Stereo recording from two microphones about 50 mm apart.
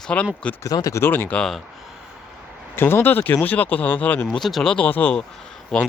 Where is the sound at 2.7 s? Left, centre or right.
Left.